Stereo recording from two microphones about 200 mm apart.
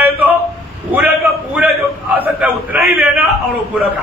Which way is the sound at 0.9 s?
10° right (ahead or behind).